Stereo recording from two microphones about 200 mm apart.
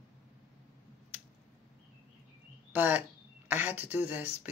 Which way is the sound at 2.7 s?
10° right (ahead or behind).